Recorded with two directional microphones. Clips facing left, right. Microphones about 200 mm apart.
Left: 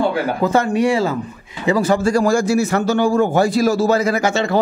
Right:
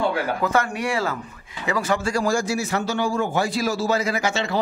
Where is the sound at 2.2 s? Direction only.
55° left (ahead or behind).